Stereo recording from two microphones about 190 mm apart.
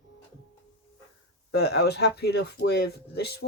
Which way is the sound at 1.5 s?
60° left (ahead or behind).